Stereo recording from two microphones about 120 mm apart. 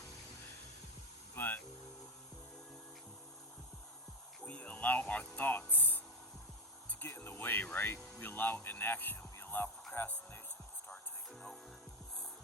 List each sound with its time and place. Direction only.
1.4 s music: 15° left (ahead or behind)
4.4 s a sound: 15° left (ahead or behind)
8.2 s speech: 15° left (ahead or behind)
9.9 s music: 15° left (ahead or behind)